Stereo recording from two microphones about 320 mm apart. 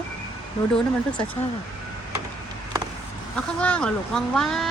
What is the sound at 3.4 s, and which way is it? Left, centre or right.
Speech, centre.